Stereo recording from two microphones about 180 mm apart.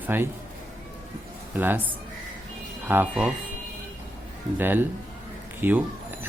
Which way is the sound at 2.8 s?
10° right (ahead or behind).